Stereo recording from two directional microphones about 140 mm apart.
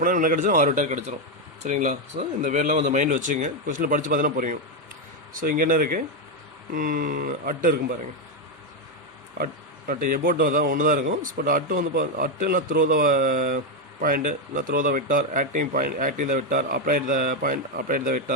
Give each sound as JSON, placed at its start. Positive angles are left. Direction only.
{"t": 0.0, "sound": "speech", "side_deg": -75}
{"t": 9.4, "sound": "speech", "side_deg": -85}